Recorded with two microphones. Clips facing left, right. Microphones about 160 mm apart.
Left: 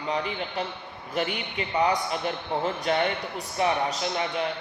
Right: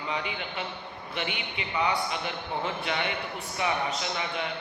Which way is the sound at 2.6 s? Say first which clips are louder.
Left 7 dB; 40° left (ahead or behind).